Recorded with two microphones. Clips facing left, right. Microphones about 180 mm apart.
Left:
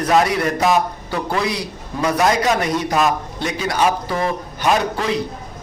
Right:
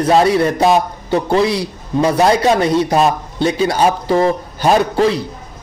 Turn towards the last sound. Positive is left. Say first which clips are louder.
# right 6 dB
turn(degrees=-35)  # may be behind; listen again after turning